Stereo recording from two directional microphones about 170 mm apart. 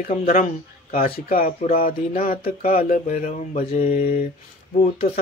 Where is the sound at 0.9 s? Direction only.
55° left (ahead or behind).